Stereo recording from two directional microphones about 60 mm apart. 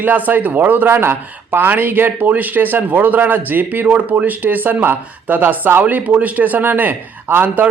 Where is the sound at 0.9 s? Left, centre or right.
Right.